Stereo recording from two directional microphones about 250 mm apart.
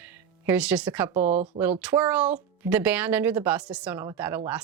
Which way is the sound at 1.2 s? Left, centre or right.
Right.